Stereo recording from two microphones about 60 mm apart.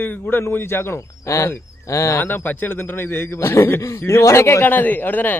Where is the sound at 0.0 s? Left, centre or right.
Left.